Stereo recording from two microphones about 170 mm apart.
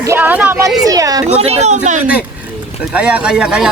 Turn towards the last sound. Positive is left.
turn(degrees=-5)  # may be behind; listen again after turning